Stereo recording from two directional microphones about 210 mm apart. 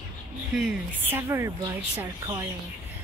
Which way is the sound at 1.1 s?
15° right (ahead or behind).